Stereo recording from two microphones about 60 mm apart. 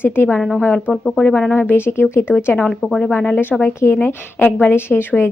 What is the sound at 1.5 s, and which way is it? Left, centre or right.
A woman's voice, left.